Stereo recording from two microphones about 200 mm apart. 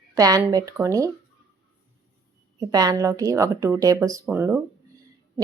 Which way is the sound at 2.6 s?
20° right (ahead or behind).